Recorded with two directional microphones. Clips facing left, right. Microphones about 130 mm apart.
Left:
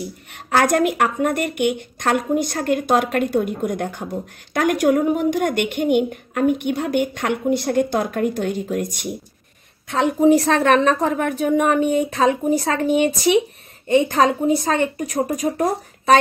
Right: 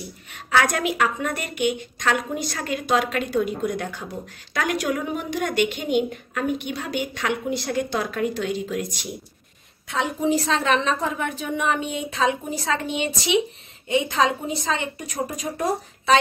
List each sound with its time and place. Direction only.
0.3 s a woman's voice: 50° left (ahead or behind)
10.2 s a woman's voice: 60° left (ahead or behind)
15.4 s speech: 30° left (ahead or behind)